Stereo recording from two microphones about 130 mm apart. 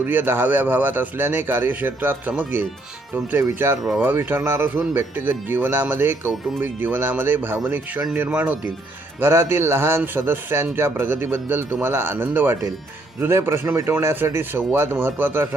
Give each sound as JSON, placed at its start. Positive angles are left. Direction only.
{"t": 0.0, "sound": "a man's voice", "side_deg": -15}